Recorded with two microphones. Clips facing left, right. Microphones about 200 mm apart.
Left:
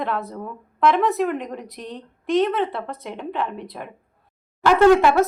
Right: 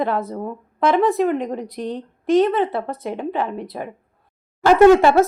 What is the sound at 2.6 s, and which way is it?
A woman's voice, 40° right (ahead or behind).